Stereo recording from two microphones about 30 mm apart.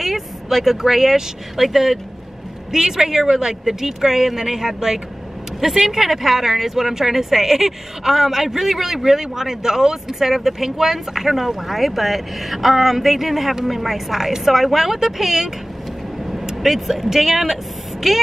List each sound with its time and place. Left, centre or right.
0.0 s speech: centre